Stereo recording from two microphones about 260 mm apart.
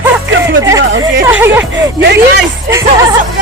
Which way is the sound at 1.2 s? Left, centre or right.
Centre.